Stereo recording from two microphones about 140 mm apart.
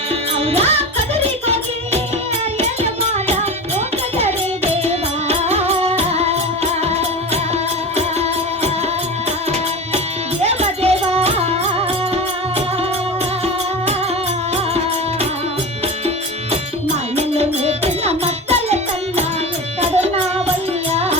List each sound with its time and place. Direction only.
0.3 s music: 45° right (ahead or behind)
3.1 s music: 50° right (ahead or behind)
7.5 s music: 50° right (ahead or behind)
10.4 s music: 45° right (ahead or behind)
17.2 s music: 45° right (ahead or behind)